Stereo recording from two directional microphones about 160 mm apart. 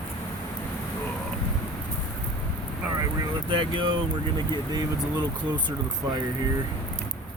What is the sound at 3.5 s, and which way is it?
Speech, 30° right (ahead or behind).